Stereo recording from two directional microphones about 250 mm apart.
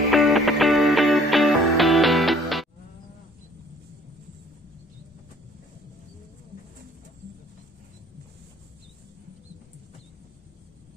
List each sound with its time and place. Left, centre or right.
0.1 s music: centre